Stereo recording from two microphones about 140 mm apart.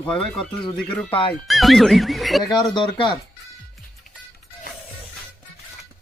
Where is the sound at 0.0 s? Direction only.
5° left (ahead or behind).